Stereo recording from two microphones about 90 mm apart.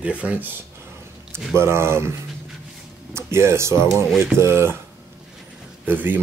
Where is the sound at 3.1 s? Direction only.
30° right (ahead or behind).